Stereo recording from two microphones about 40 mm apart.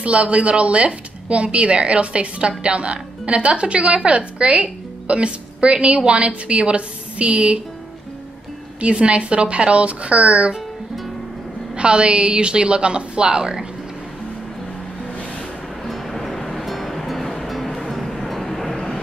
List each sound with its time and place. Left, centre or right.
0.0 s speech: right
8.8 s speech: right
11.7 s speech: right
15.8 s music: centre